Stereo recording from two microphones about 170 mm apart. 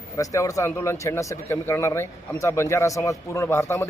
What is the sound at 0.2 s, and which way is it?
Speech, 20° left (ahead or behind).